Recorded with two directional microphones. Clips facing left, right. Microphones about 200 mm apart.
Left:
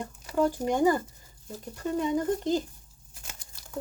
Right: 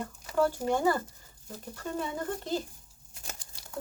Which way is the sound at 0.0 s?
15° left (ahead or behind).